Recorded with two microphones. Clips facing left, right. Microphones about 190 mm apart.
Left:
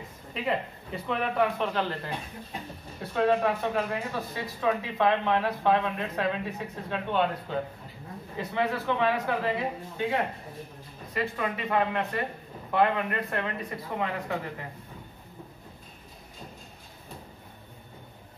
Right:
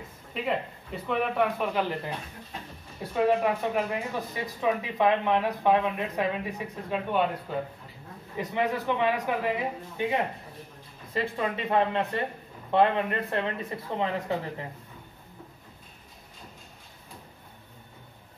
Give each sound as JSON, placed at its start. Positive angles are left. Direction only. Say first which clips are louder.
{"t": 0.3, "sound": "speech", "louder": "even", "side_deg": 0}
{"t": 3.0, "sound": "speech", "louder": "even", "side_deg": -10}
{"t": 11.1, "sound": "speech", "louder": "right 1 dB", "side_deg": -25}